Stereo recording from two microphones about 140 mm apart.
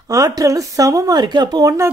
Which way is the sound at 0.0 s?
25° right (ahead or behind).